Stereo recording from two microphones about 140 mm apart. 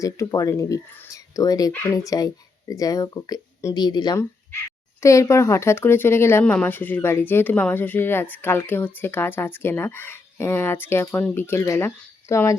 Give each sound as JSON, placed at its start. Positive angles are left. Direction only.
{"t": 0.0, "sound": "speech", "side_deg": 25}